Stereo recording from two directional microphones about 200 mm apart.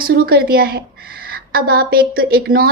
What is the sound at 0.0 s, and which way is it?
A woman's voice, 50° right (ahead or behind).